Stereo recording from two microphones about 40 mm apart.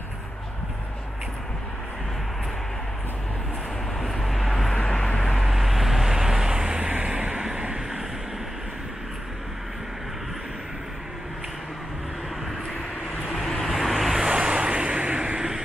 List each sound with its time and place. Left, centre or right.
4.0 s vehicle: centre
4.8 s vehicle: centre
5.4 s vehicle: centre
13.3 s vehicle: centre
14.2 s vehicle: right